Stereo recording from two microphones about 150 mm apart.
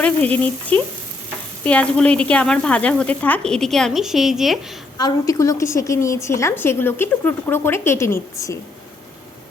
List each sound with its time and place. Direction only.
0.0 s a woman's voice: 10° left (ahead or behind)
4.9 s a woman's voice: 25° left (ahead or behind)